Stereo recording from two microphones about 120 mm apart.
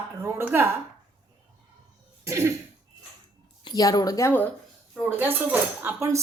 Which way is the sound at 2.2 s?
25° right (ahead or behind).